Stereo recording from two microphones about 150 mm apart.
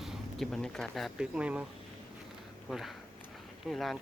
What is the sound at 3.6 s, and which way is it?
Speech, centre (ahead or behind).